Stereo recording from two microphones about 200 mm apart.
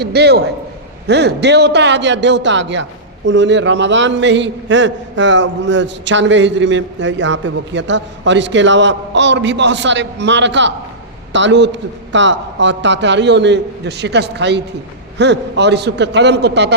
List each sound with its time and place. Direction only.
0.0 s a man's voice: 55° right (ahead or behind)